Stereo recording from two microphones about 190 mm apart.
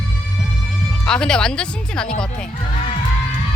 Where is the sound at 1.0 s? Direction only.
5° left (ahead or behind).